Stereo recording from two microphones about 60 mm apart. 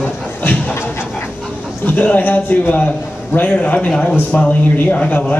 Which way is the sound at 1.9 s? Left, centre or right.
Left.